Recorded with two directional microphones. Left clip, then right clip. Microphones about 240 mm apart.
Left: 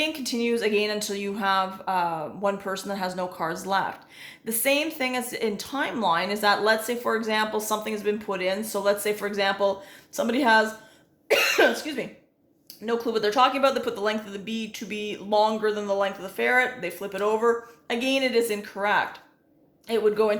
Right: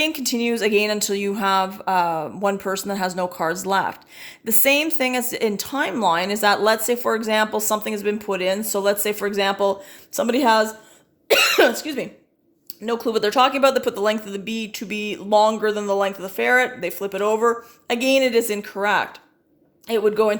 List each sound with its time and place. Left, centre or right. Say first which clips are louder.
0.0 s speech: right 5 dB; right